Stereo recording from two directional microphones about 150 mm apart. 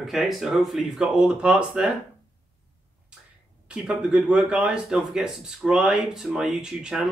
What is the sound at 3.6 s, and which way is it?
Speech, 5° right (ahead or behind).